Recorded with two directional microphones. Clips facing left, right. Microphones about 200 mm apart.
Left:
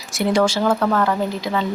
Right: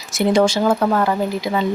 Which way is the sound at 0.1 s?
20° right (ahead or behind).